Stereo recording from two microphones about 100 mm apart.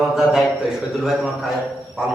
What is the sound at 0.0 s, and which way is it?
A man's voice, 5° right (ahead or behind).